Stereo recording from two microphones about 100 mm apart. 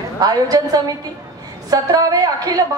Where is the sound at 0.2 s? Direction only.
40° right (ahead or behind).